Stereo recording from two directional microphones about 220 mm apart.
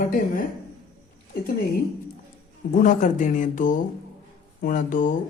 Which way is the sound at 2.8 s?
35° left (ahead or behind).